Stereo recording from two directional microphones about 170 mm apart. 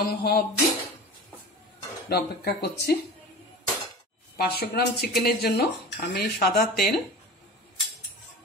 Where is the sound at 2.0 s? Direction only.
70° left (ahead or behind).